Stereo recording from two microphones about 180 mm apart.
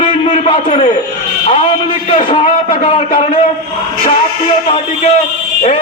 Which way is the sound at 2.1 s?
30° left (ahead or behind).